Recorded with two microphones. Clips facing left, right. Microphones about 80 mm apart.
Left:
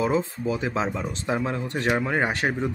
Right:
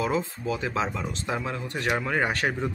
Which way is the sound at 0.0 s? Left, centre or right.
Left.